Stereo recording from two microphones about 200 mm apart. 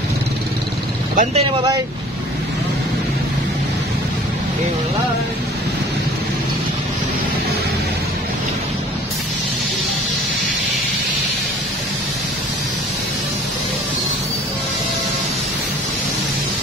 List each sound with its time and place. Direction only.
1.1 s speech: 40° right (ahead or behind)